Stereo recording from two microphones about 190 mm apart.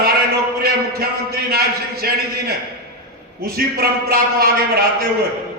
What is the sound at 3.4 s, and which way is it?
A man's voice, 55° right (ahead or behind).